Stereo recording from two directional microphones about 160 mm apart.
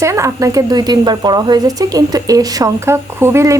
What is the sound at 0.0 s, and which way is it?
Speech, 20° right (ahead or behind).